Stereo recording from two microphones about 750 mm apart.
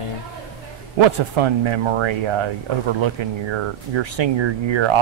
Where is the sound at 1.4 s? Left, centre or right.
Right.